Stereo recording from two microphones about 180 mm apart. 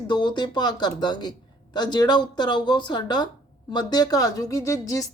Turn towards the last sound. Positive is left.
turn(degrees=15)  # may be behind; listen again after turning